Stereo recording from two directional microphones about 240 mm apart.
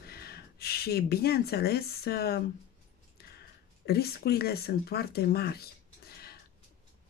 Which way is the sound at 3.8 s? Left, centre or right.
Left.